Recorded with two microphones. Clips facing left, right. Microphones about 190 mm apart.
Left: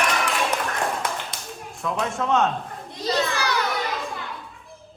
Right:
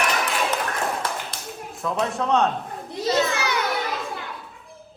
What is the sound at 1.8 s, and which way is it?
Speech, centre (ahead or behind).